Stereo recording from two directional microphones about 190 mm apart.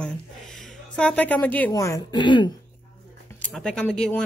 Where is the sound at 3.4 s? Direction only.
5° left (ahead or behind).